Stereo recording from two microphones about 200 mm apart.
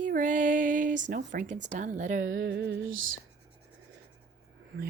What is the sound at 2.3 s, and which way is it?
Music, 65° right (ahead or behind).